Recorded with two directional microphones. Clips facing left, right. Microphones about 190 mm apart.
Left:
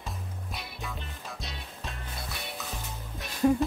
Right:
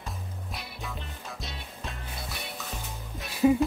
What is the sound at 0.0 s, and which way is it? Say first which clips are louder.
Music: even; centre (ahead or behind).